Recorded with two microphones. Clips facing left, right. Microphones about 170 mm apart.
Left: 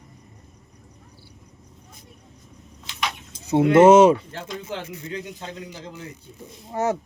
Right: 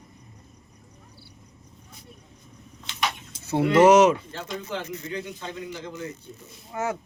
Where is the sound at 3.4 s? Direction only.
15° left (ahead or behind).